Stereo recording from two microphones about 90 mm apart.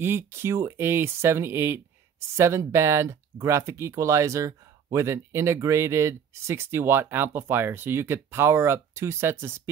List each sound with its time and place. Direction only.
0.0 s speech: 25° right (ahead or behind)